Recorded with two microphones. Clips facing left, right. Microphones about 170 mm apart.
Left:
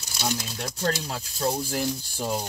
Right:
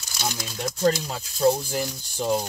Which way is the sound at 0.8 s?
Centre (ahead or behind).